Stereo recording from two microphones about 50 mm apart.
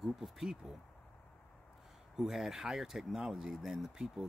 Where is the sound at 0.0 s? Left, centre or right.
Centre.